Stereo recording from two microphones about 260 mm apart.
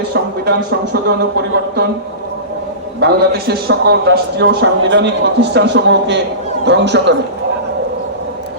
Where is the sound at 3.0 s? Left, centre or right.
Right.